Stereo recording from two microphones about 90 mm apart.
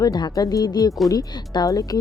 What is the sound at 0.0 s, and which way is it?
Speech, 50° left (ahead or behind).